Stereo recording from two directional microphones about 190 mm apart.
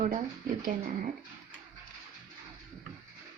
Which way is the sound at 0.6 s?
45° right (ahead or behind).